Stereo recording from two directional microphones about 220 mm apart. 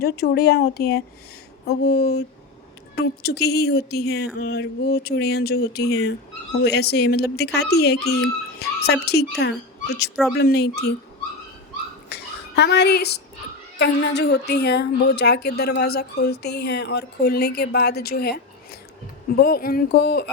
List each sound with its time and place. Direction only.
0.0 s a woman's voice: 45° left (ahead or behind)
12.0 s a sound: 50° left (ahead or behind)
13.7 s a woman's voice: 50° left (ahead or behind)